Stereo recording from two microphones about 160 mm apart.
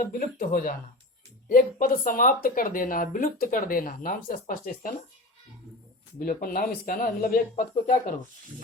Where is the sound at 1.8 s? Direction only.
60° left (ahead or behind).